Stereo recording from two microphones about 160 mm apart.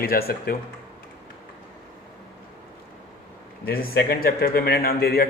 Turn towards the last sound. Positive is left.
turn(degrees=70)  # may be behind; listen again after turning